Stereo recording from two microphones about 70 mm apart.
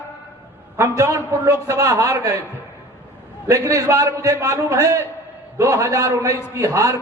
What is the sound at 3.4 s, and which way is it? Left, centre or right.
A man's voice, right.